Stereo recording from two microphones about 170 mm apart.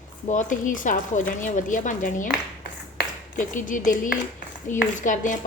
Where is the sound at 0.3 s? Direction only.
50° left (ahead or behind).